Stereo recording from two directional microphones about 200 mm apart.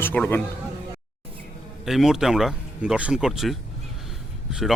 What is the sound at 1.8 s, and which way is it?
Speech, centre (ahead or behind).